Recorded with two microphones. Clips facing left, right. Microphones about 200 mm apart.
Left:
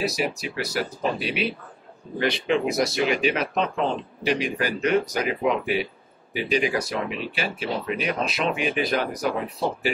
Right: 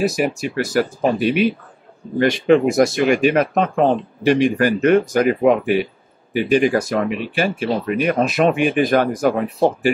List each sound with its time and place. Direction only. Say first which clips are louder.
0.0 s speech: right 7 dB; 50° right (ahead or behind)